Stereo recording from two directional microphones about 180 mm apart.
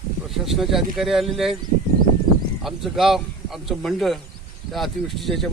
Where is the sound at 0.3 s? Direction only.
Centre (ahead or behind).